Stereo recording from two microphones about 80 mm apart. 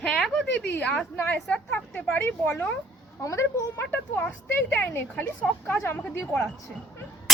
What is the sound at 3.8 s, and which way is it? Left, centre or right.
A woman's voice, left.